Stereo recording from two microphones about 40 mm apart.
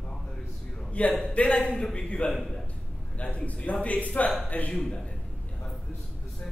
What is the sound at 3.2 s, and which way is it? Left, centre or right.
A man's voice, left.